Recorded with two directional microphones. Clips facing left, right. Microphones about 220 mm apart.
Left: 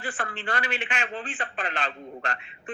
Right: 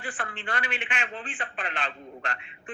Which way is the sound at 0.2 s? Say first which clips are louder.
Left 2 dB; 40° left (ahead or behind).